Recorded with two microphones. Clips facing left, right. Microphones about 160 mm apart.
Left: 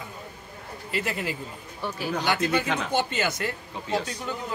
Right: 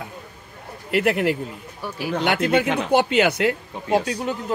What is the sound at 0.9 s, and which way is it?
Speech, 65° right (ahead or behind).